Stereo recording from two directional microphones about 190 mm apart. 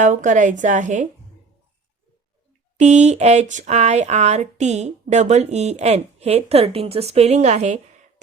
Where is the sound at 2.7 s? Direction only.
35° right (ahead or behind).